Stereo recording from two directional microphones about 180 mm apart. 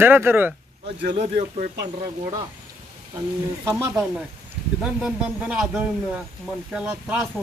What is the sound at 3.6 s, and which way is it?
Speech, 15° right (ahead or behind).